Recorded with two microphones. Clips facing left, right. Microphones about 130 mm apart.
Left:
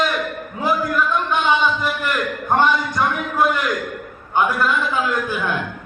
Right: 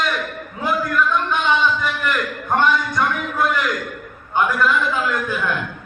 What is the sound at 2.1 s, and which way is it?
A man's voice, centre (ahead or behind).